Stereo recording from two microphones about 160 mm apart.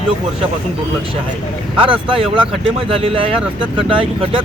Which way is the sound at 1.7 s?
35° right (ahead or behind).